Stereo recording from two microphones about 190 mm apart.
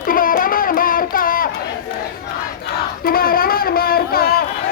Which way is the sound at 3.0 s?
50° left (ahead or behind).